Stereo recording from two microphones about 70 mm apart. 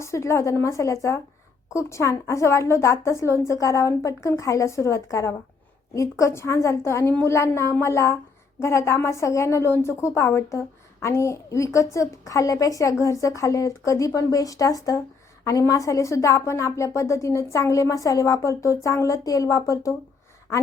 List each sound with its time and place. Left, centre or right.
0.0 s a woman's voice: left